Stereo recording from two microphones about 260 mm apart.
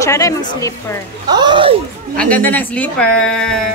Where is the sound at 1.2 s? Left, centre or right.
Centre.